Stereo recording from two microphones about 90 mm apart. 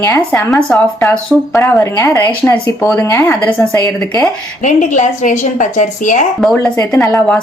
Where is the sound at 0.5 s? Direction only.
5° left (ahead or behind).